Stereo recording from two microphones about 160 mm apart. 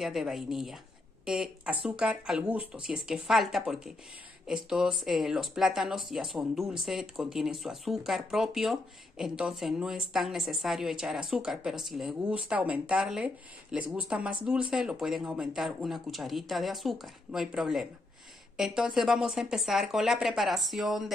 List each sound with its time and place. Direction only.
0.0 s speech: centre (ahead or behind)